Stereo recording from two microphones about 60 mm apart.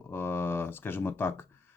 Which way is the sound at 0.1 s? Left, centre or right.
Left.